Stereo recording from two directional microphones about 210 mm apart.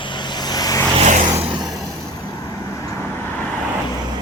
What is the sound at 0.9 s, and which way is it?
Vehicle, 35° right (ahead or behind).